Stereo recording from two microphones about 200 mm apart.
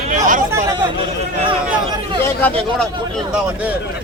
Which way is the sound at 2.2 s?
5° left (ahead or behind).